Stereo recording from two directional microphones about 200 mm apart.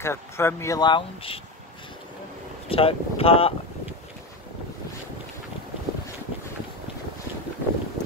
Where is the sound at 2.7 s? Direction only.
30° left (ahead or behind).